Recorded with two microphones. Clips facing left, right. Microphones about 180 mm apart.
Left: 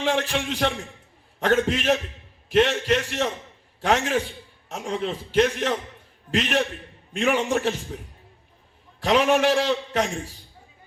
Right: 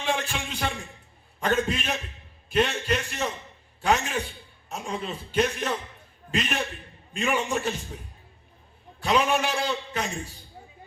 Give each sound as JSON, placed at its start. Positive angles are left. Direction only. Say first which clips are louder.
{"t": 0.0, "sound": "a man's voice", "louder": "left 5 dB", "side_deg": 80}
{"t": 9.0, "sound": "a man's voice", "louder": "left 4 dB", "side_deg": 80}